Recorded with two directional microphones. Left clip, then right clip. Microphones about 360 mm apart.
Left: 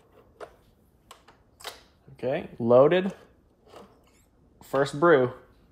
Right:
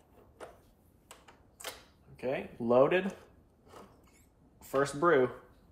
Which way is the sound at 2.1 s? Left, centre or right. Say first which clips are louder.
Left 6 dB; left.